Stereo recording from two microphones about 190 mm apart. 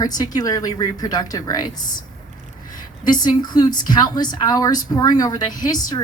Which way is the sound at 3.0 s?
20° left (ahead or behind).